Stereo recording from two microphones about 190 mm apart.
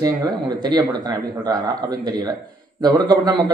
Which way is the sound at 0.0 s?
20° right (ahead or behind).